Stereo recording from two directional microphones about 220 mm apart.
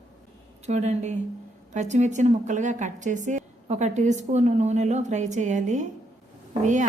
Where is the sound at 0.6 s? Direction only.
30° right (ahead or behind).